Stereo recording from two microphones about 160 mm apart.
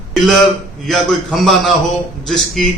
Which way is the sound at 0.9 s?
Centre (ahead or behind).